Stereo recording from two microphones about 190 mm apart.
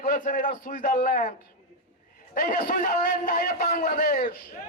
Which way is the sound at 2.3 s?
50° left (ahead or behind).